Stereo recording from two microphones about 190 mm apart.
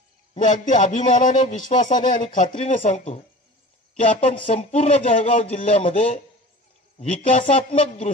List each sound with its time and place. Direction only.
0.3 s a man's voice: 40° left (ahead or behind)
4.2 s a man's voice: 30° left (ahead or behind)